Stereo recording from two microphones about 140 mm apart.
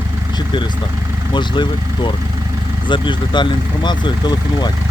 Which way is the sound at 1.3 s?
35° left (ahead or behind).